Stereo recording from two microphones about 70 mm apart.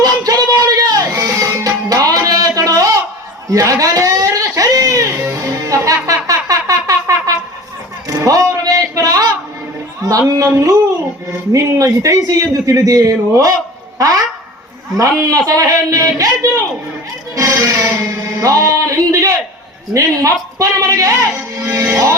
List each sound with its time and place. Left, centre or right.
0.0 s music: right
3.5 s a sound: right
8.0 s music: right
10.1 s speech: right
15.2 s speech: right
17.6 s music: right
18.2 s speech: right